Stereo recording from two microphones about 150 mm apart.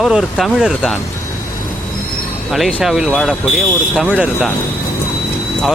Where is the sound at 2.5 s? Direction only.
Centre (ahead or behind).